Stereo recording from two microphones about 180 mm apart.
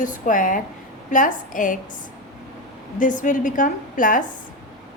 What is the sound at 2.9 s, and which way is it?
A woman's voice, 45° left (ahead or behind).